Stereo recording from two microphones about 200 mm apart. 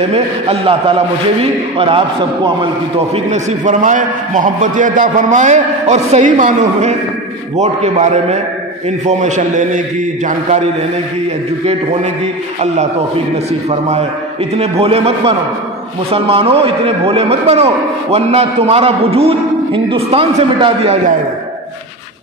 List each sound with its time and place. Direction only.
0.1 s a man's voice: 30° right (ahead or behind)
3.3 s a man's voice: 40° right (ahead or behind)
13.7 s a man's voice: 30° right (ahead or behind)